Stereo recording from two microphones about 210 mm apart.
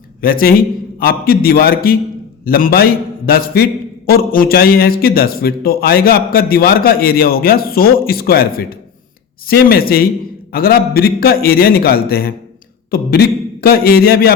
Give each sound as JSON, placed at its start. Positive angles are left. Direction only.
{"t": 0.2, "sound": "a man's voice", "side_deg": 45}